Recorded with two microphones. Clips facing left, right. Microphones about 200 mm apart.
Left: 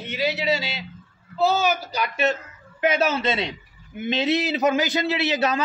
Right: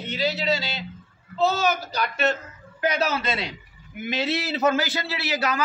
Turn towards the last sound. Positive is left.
turn(degrees=25)  # may be behind; listen again after turning